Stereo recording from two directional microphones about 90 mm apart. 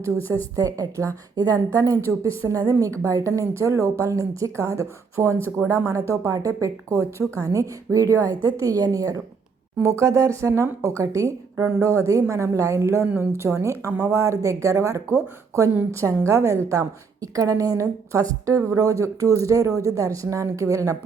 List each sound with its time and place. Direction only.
0.5 s a woman's voice: 40° right (ahead or behind)
15.7 s a woman's voice: 20° right (ahead or behind); by 20.9 s 35° right (ahead or behind)